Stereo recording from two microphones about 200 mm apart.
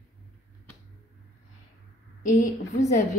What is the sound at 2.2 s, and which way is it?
Speech, 40° left (ahead or behind).